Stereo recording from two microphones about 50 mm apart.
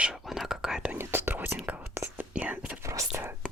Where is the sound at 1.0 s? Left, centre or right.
Right.